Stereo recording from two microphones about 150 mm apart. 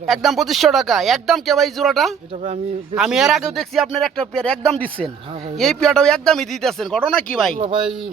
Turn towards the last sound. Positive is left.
turn(degrees=-35)  # may be behind; listen again after turning